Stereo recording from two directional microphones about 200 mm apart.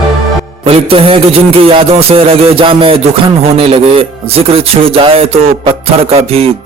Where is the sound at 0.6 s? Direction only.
30° right (ahead or behind).